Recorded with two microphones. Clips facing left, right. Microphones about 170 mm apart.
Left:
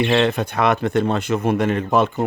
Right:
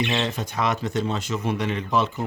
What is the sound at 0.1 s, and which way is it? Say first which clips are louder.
Speech: left 8 dB; 60° left (ahead or behind).